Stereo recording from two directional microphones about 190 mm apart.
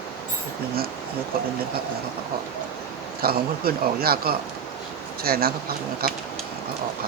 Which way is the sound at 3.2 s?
55° right (ahead or behind).